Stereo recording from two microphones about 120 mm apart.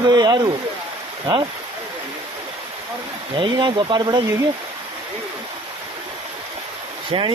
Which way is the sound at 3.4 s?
40° right (ahead or behind).